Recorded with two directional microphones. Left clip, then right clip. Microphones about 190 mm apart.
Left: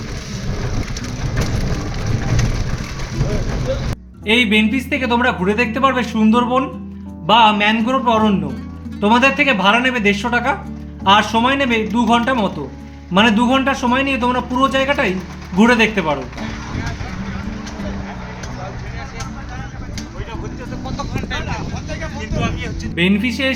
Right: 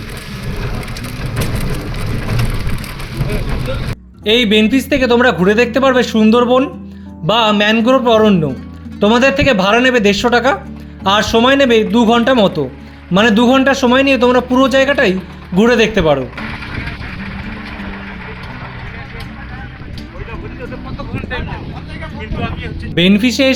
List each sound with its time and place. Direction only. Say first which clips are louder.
4.3 s a man's voice: right 3 dB; 55° right (ahead or behind)
22.4 s a sound: even; 65° left (ahead or behind)
23.0 s a man's voice: right 6 dB; 60° right (ahead or behind)